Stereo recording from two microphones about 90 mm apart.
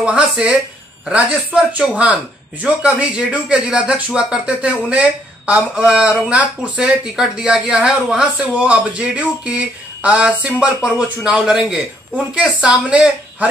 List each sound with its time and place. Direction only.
0.0 s a woman's voice: 10° right (ahead or behind)